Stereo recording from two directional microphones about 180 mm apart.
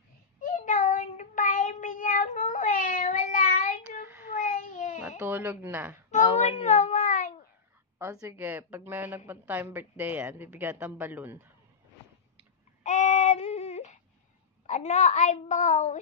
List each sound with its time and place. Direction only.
0.4 s child singing: 45° left (ahead or behind)
5.2 s a woman's voice: 10° right (ahead or behind)
6.1 s child singing: 40° left (ahead or behind)
8.0 s a woman's voice: 15° right (ahead or behind)
12.8 s a sound: 40° left (ahead or behind)
14.7 s a child's voice: 40° left (ahead or behind)